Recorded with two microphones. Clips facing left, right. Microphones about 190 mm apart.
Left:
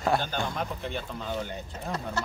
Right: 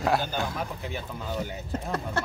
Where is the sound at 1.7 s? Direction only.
55° right (ahead or behind).